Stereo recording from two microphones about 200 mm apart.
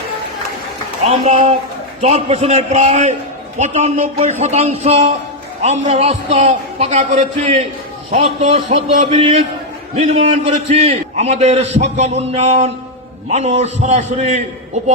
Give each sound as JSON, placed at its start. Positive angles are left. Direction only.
{"t": 1.0, "sound": "a man's voice", "side_deg": -35}